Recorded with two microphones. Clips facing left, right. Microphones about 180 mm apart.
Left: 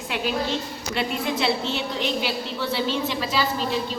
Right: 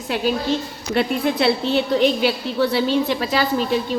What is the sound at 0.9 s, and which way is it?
A woman's voice, 60° right (ahead or behind).